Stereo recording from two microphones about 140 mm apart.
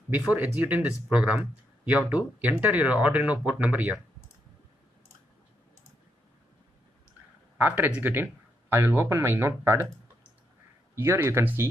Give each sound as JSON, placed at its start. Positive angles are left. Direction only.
{"t": 0.3, "sound": "speech", "side_deg": -10}
{"t": 7.5, "sound": "speech", "side_deg": -15}
{"t": 11.0, "sound": "speech", "side_deg": -15}